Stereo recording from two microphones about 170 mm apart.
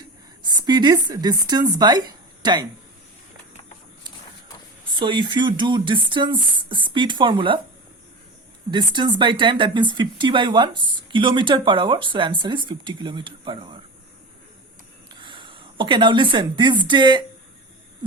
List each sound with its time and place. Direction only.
0.0 s a sound: 25° right (ahead or behind)
1.0 s speech: 20° right (ahead or behind)
4.9 s speech: 30° right (ahead or behind)
8.7 s speech: 25° right (ahead or behind)
15.1 s a sound: 30° right (ahead or behind)
16.8 s speech: 25° right (ahead or behind)